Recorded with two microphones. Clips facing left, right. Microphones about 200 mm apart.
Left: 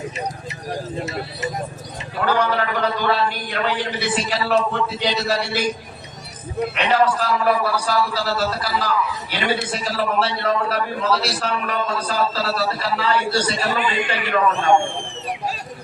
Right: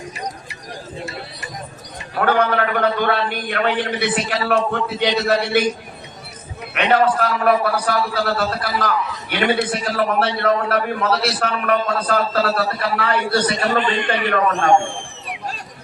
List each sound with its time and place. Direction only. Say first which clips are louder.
2.1 s a man's voice: right 3 dB; 55° right (ahead or behind)
6.7 s a man's voice: right 3 dB; 55° right (ahead or behind)
13.7 s a man's voice: right 3 dB; 5° left (ahead or behind)